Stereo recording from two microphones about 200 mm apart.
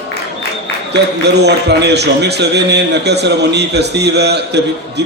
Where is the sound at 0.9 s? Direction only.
55° right (ahead or behind).